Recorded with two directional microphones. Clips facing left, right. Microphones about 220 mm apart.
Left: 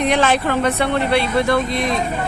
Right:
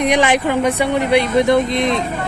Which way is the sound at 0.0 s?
15° right (ahead or behind).